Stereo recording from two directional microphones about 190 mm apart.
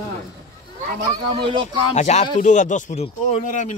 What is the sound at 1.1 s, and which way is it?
Speech, 25° right (ahead or behind).